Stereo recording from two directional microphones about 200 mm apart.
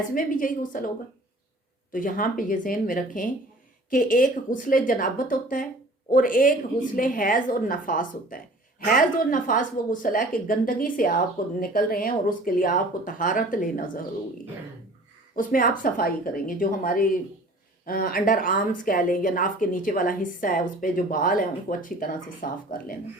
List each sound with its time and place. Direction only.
0.1 s a woman's voice: 45° left (ahead or behind)
1.9 s a woman's voice: 40° left (ahead or behind)
15.4 s a woman's voice: 40° left (ahead or behind)